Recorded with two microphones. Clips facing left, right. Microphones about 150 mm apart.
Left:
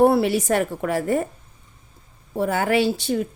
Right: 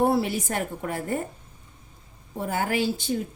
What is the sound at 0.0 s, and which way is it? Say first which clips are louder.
A woman's voice: left 6 dB; 65° left (ahead or behind).